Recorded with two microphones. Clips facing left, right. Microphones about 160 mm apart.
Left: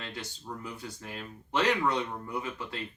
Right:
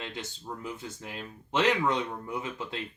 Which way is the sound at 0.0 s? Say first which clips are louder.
Right 2 dB; 20° right (ahead or behind).